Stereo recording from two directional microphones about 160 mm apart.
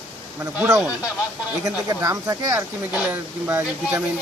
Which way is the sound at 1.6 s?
20° right (ahead or behind).